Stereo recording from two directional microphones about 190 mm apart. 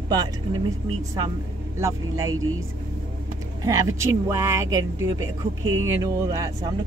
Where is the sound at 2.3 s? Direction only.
90° right.